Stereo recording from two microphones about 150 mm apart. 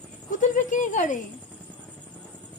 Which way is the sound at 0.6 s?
55° left (ahead or behind).